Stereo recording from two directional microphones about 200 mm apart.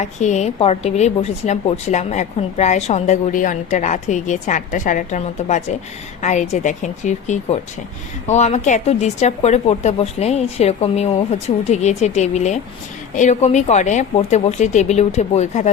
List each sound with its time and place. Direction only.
0.0 s a woman's voice: 35° left (ahead or behind)